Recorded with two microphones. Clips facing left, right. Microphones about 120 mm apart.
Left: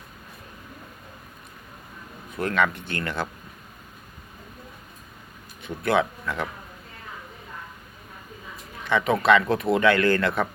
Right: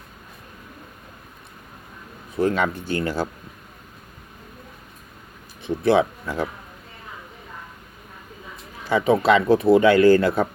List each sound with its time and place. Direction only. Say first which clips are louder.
2.3 s speech: right 3 dB; 30° right (ahead or behind)
5.6 s speech: right 5 dB; 30° right (ahead or behind)
8.8 s speech: right 4 dB; 35° right (ahead or behind)